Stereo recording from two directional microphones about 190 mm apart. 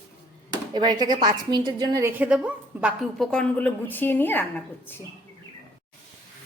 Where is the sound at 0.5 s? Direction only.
20° right (ahead or behind); by 5.0 s 10° left (ahead or behind).